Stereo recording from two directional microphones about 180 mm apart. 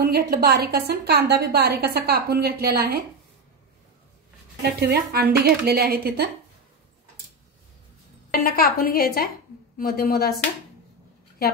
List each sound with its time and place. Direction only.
0.0 s a woman's voice: 60° right (ahead or behind)
4.6 s a woman's voice: 65° right (ahead or behind)
8.3 s a woman's voice: 55° left (ahead or behind)